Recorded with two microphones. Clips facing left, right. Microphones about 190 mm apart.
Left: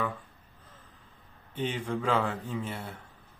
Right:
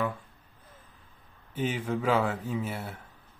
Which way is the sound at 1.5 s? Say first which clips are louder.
Right 2 dB; 5° right (ahead or behind).